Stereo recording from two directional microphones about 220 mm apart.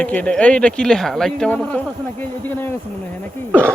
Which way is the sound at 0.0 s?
5° left (ahead or behind).